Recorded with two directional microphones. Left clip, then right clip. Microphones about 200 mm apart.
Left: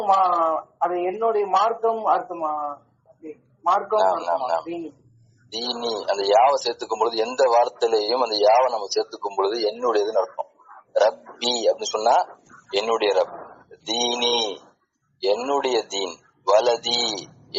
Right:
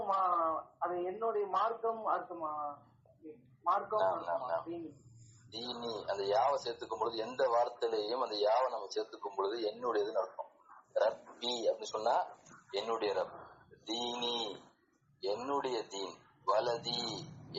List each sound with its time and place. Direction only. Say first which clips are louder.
0.1 s a man's voice: left 13 dB; 45° left (ahead or behind)
15.2 s a man's voice: left 14 dB; 45° left (ahead or behind)